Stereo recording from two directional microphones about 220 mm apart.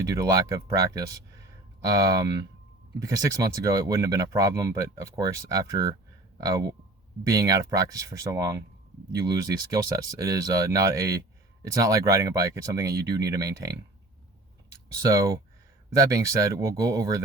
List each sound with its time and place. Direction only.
0.0 s speech: 15° right (ahead or behind)
9.7 s speech: 15° right (ahead or behind)
16.0 s speech: 15° right (ahead or behind)